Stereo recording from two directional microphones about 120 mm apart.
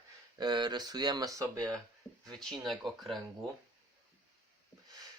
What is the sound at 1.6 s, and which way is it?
Speech, 10° left (ahead or behind).